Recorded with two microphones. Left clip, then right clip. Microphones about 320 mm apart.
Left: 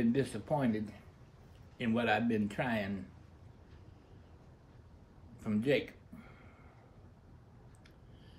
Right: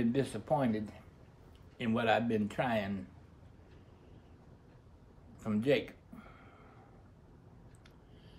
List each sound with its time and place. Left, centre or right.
0.0 s speech: centre
5.4 s speech: centre